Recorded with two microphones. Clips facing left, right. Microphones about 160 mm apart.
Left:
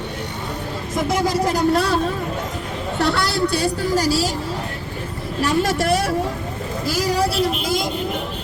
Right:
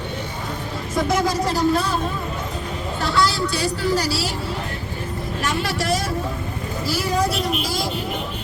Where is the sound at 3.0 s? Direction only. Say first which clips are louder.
Left 1 dB; 65° left (ahead or behind); by 4.3 s 45° left (ahead or behind).